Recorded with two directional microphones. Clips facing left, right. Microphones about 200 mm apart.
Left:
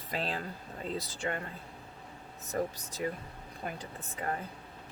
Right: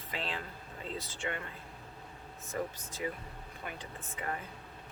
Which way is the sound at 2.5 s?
40° left (ahead or behind).